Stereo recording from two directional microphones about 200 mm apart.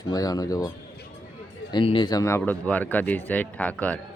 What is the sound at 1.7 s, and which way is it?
Speech, 25° left (ahead or behind).